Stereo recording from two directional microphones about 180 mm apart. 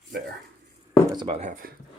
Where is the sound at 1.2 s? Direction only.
35° right (ahead or behind).